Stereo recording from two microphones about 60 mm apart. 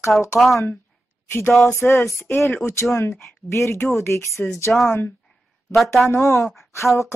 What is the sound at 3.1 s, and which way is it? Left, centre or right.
Speech, centre.